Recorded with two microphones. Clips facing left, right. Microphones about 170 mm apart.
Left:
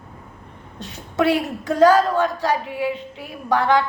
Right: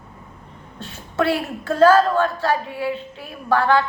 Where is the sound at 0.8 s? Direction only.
15° left (ahead or behind).